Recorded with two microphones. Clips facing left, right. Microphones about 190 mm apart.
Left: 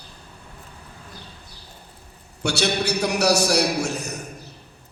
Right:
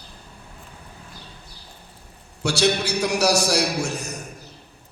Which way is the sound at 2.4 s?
65° left (ahead or behind).